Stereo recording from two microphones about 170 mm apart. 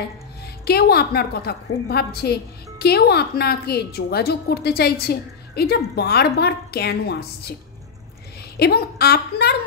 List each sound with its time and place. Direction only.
0.7 s a woman's voice: 70° left (ahead or behind)
8.5 s a woman's voice: 70° left (ahead or behind)